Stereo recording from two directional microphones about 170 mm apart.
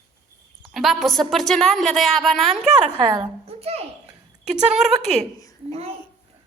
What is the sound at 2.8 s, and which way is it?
A woman's voice, 30° right (ahead or behind).